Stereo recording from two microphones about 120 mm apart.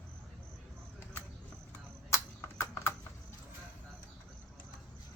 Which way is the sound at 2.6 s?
20° left (ahead or behind).